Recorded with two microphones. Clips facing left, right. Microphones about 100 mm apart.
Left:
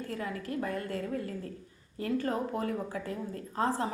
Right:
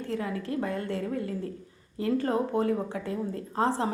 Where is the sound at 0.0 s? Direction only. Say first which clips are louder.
Right 5 dB; 30° right (ahead or behind).